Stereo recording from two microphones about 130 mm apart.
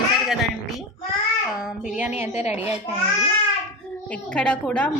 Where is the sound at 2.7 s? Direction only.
55° left (ahead or behind).